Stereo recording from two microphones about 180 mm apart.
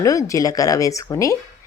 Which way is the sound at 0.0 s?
20° left (ahead or behind).